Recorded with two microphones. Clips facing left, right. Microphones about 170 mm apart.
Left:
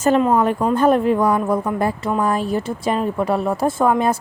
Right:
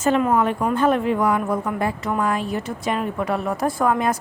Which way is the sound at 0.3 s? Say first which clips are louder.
Left 3 dB; 35° left (ahead or behind).